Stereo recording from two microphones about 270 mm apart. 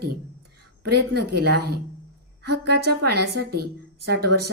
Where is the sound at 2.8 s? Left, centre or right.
Right.